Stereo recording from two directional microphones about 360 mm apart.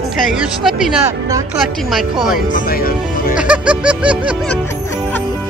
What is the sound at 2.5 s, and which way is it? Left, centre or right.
Speech, left.